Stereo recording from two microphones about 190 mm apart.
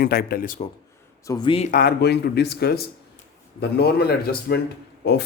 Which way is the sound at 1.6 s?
50° left (ahead or behind).